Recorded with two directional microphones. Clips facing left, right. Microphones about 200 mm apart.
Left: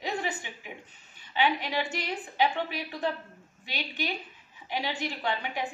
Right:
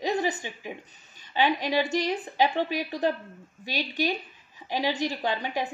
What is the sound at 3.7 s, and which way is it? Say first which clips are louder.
A woman's voice: right 6 dB; 40° right (ahead or behind).